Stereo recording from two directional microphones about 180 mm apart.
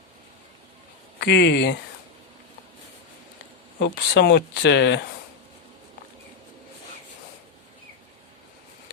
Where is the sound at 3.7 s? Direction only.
60° left (ahead or behind); by 5.0 s 75° left (ahead or behind).